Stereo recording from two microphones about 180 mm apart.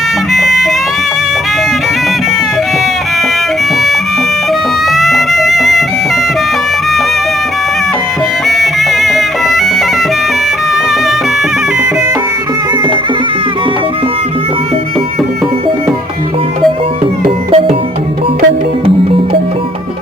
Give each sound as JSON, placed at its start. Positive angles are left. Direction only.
{"t": 0.3, "sound": "music", "side_deg": 0}
{"t": 4.9, "sound": "music", "side_deg": 0}
{"t": 8.4, "sound": "music", "side_deg": 0}
{"t": 17.5, "sound": "music", "side_deg": -30}